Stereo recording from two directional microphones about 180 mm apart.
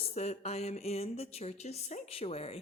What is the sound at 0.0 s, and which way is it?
Speech, 35° left (ahead or behind).